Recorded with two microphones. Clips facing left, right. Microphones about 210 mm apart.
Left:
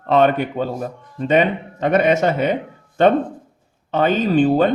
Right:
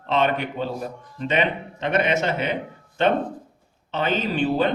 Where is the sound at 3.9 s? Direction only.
45° left (ahead or behind).